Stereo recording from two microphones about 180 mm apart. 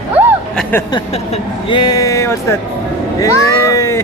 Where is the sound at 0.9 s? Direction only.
30° left (ahead or behind).